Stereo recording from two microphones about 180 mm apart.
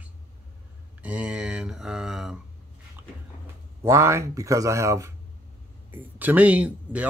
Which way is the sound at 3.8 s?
15° right (ahead or behind).